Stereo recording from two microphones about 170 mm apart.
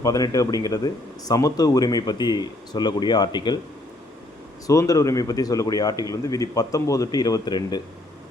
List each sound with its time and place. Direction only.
0.0 s speech: 20° left (ahead or behind)
4.6 s speech: 20° left (ahead or behind)